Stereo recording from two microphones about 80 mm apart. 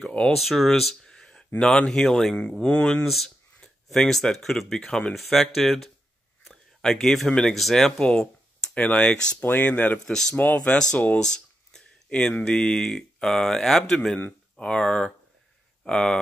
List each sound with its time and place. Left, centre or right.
0.3 s speech: centre
3.1 s speech: centre
10.0 s speech: centre
10.3 s speech: centre